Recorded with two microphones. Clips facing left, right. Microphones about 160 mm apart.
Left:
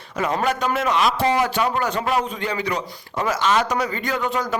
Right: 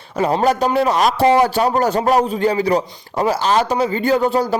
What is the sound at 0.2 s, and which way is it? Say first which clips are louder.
A man's voice: right 6 dB; 35° right (ahead or behind).